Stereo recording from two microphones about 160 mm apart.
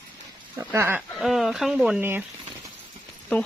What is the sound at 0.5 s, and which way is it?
Speech, 15° right (ahead or behind).